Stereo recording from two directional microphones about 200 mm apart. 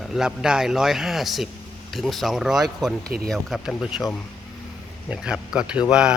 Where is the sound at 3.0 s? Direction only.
50° right (ahead or behind).